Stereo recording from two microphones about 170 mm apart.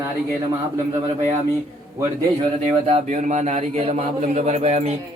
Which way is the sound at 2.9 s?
45° right (ahead or behind).